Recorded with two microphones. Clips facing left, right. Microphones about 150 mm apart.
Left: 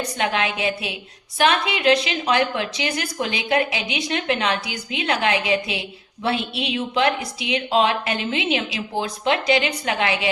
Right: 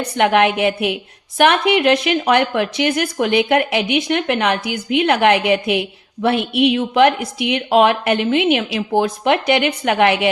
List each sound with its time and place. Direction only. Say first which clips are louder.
0.2 s speech: right 10 dB; 60° right (ahead or behind)